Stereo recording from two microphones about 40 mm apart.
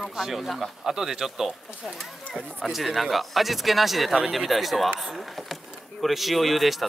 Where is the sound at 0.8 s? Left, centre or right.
Centre.